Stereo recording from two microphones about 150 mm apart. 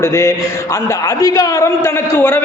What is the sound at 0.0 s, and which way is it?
A man's voice, 20° left (ahead or behind).